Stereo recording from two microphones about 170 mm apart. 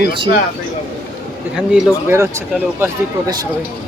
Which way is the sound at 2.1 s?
15° right (ahead or behind).